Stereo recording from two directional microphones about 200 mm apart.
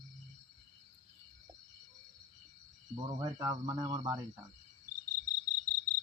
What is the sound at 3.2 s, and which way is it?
Speech, 15° right (ahead or behind).